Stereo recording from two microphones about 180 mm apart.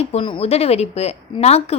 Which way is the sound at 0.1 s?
30° left (ahead or behind).